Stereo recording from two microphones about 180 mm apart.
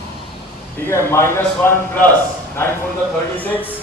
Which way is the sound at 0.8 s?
15° left (ahead or behind).